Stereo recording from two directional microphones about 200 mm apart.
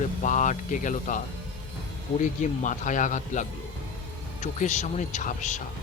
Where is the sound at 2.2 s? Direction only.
40° left (ahead or behind).